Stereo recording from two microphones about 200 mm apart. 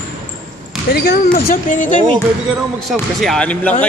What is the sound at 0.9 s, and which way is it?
Speech, 55° left (ahead or behind).